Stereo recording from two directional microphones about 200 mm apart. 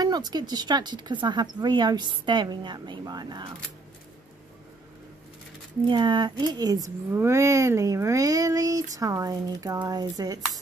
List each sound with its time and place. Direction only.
0.0 s speech: 20° right (ahead or behind)
5.9 s a child's voice: 20° right (ahead or behind)